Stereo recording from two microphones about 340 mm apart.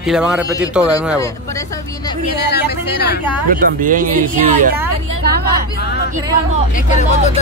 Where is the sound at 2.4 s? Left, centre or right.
Left.